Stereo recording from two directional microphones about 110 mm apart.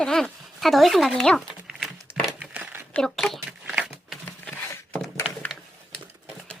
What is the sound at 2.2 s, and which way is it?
Crumpling, centre (ahead or behind).